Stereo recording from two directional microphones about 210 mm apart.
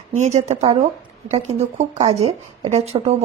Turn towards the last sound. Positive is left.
turn(degrees=-30)  # may be behind; listen again after turning